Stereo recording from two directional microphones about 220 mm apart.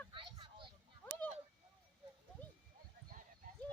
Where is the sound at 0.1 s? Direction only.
20° right (ahead or behind).